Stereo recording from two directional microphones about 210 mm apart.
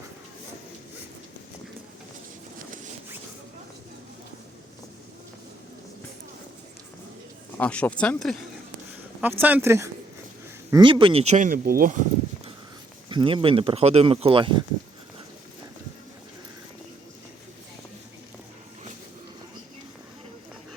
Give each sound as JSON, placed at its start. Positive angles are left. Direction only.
{"t": 7.6, "sound": "speech", "side_deg": 5}
{"t": 9.2, "sound": "speech", "side_deg": -10}
{"t": 13.1, "sound": "speech", "side_deg": -25}